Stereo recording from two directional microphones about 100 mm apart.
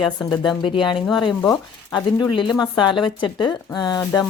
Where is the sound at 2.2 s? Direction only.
50° left (ahead or behind).